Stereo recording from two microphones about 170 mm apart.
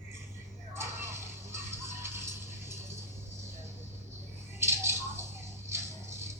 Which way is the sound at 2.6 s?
15° right (ahead or behind).